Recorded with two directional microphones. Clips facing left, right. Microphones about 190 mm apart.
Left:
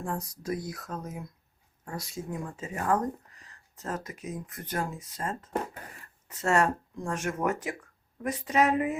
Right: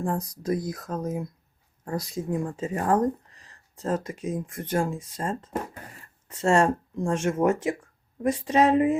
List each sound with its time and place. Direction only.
0.0 s speech: 35° right (ahead or behind)